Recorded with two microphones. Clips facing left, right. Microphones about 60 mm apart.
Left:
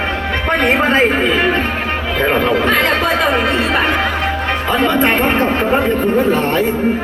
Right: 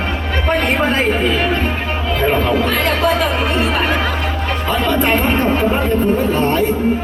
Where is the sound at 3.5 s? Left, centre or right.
Left.